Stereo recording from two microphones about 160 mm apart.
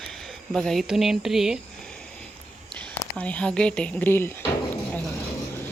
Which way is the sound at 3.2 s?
10° left (ahead or behind).